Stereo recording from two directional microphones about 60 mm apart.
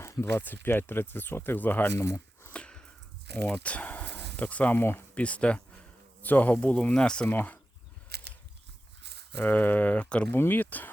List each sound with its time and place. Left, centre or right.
0.0 s speech: left
2.0 s a sound: left
2.5 s sniff: centre
3.3 s speech: left
7.3 s speech: left
9.4 s speech: left
10.3 s speech: left